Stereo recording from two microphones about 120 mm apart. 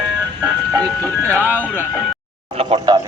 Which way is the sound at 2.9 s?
35° right (ahead or behind).